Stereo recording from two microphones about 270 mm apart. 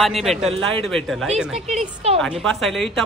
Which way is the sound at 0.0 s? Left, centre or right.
Centre.